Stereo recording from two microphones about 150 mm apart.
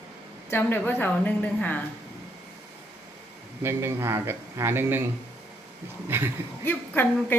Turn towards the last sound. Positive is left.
turn(degrees=15)  # may be behind; listen again after turning